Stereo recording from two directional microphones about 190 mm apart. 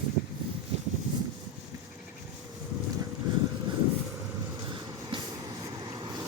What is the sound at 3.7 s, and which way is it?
Vehicle, 25° right (ahead or behind).